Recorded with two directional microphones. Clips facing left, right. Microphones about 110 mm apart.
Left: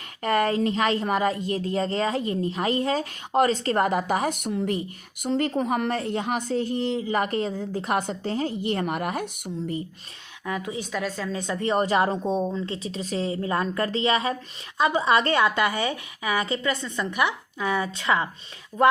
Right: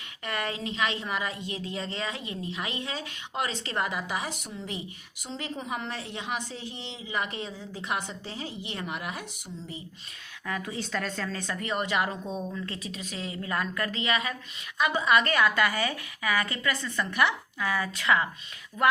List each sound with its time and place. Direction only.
0.2 s a woman's voice: 45° left (ahead or behind)
10.4 s a woman's voice: 20° left (ahead or behind)
11.5 s a woman's voice: 35° left (ahead or behind)